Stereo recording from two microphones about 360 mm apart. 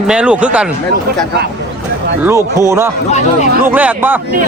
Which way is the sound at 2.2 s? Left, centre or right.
Centre.